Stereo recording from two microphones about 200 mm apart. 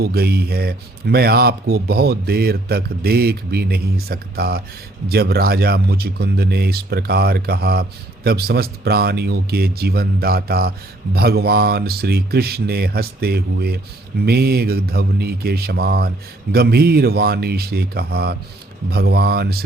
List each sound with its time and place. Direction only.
0.0 s speech: 50° right (ahead or behind)